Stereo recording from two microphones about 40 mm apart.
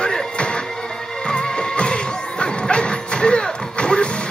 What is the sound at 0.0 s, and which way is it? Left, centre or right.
Music, left.